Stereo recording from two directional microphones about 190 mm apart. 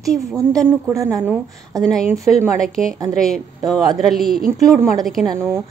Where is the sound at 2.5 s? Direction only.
5° left (ahead or behind).